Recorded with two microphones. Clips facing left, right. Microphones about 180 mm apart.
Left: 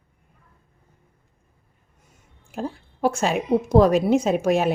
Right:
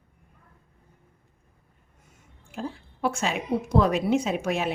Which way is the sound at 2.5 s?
40° left (ahead or behind).